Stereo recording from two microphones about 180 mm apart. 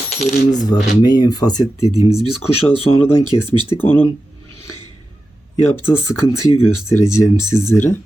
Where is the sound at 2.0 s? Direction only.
35° left (ahead or behind).